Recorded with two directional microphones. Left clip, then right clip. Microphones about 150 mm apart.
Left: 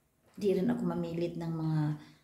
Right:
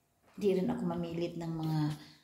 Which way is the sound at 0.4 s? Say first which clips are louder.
Left 1 dB; 10° left (ahead or behind).